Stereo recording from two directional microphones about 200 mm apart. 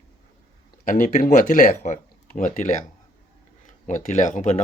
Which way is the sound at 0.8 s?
40° left (ahead or behind).